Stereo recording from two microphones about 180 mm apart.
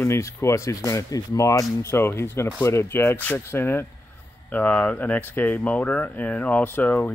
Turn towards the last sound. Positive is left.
turn(degrees=10)  # may be behind; listen again after turning